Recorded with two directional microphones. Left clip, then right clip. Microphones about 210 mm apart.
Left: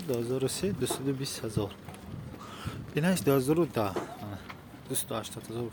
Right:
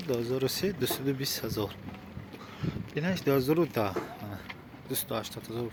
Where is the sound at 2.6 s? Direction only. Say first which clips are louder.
Left 2 dB; 30° left (ahead or behind); by 3.9 s 10° left (ahead or behind).